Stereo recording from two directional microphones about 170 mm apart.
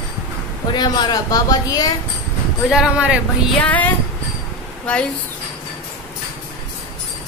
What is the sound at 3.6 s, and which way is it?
Speech, 10° left (ahead or behind).